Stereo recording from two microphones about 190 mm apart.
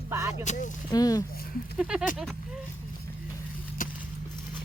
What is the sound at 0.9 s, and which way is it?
Speech, 20° left (ahead or behind).